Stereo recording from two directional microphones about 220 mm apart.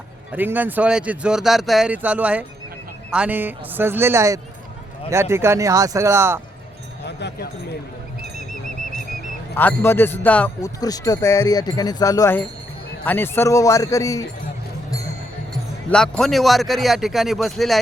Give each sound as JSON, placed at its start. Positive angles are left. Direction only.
{"t": 0.3, "sound": "speech", "side_deg": -10}
{"t": 7.0, "sound": "a sound", "side_deg": 50}
{"t": 9.6, "sound": "speech", "side_deg": 10}
{"t": 15.9, "sound": "a man's voice", "side_deg": 5}